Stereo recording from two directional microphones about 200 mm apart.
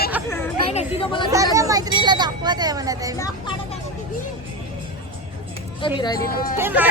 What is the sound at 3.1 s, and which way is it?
Speech, 15° left (ahead or behind).